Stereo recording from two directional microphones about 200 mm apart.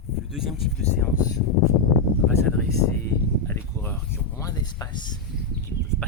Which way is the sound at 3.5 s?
10° left (ahead or behind).